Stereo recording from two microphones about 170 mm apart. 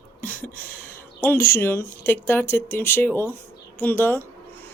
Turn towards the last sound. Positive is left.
turn(degrees=10)  # may be behind; listen again after turning